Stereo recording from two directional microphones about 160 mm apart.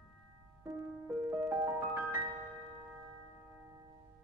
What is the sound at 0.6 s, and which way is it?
Music, 20° right (ahead or behind).